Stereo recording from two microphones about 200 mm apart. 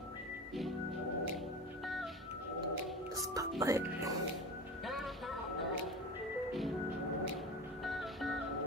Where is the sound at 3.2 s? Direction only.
15° right (ahead or behind).